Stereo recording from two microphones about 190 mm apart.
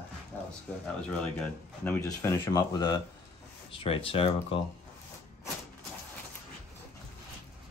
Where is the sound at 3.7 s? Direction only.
30° left (ahead or behind).